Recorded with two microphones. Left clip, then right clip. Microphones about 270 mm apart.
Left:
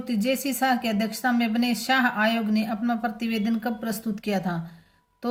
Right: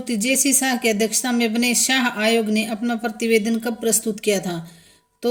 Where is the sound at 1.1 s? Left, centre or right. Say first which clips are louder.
Right 3 dB; left.